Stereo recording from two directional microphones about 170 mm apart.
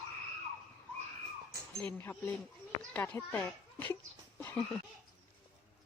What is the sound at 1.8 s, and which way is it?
A child's voice, 10° left (ahead or behind).